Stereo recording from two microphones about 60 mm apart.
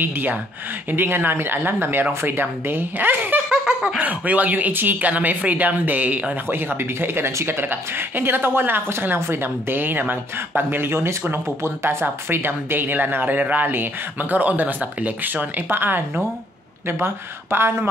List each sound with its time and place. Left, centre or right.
0.0 s speech: right
3.4 s laughter: centre
4.0 s speech: right
6.5 s speech: right